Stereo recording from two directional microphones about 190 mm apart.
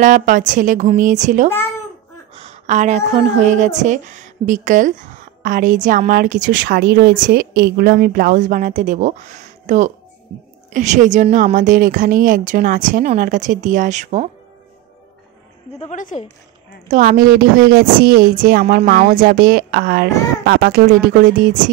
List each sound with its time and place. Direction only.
0.0 s a woman's voice: 40° right (ahead or behind)
15.8 s a woman's voice: 40° left (ahead or behind)
16.9 s a woman's voice: 45° right (ahead or behind)